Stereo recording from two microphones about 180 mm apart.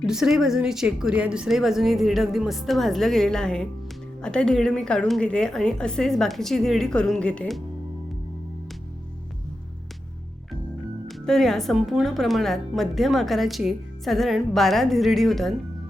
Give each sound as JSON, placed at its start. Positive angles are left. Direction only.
{"t": 0.0, "sound": "a woman's voice", "side_deg": -5}
{"t": 11.1, "sound": "a woman's voice", "side_deg": 0}